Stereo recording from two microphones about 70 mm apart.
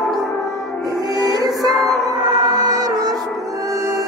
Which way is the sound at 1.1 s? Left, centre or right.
Right.